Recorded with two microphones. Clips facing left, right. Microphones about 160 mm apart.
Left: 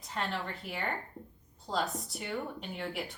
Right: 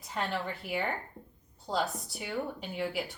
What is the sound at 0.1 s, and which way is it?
A woman's voice, 5° right (ahead or behind).